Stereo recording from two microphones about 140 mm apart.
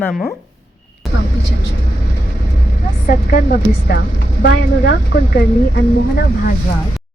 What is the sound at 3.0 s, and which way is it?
Speech, 85° left.